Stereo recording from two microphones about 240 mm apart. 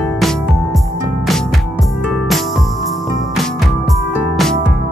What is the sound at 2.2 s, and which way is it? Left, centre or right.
Music, centre.